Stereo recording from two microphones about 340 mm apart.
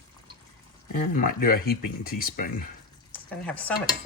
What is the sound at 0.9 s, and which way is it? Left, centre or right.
Speech, left.